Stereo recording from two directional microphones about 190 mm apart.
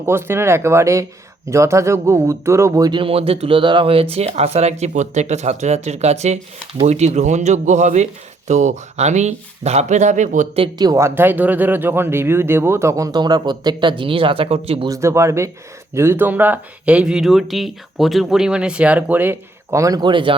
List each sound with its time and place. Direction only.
0.0 s speech: 10° right (ahead or behind); by 14.8 s 30° right (ahead or behind)
14.8 s speech: 15° right (ahead or behind)